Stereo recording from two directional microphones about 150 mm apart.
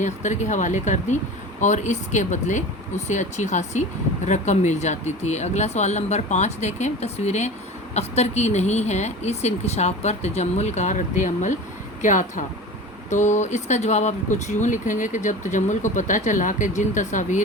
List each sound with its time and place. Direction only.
0.0 s speech: 55° left (ahead or behind)